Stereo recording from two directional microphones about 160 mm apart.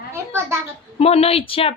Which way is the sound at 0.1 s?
15° right (ahead or behind).